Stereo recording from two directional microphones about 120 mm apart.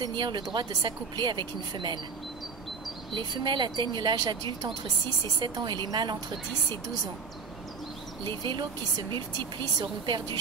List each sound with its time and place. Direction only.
0.0 s speech: 40° right (ahead or behind)
3.2 s speech: 40° right (ahead or behind)
8.2 s speech: 40° right (ahead or behind)